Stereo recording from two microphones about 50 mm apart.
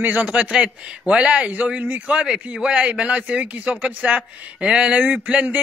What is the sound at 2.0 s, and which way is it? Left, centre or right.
Speech, right.